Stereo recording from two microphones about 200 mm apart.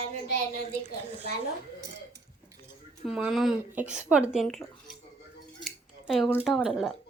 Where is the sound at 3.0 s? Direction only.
5° right (ahead or behind).